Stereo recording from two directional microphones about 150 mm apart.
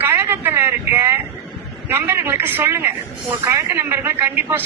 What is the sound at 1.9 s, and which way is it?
A man's voice, 15° right (ahead or behind).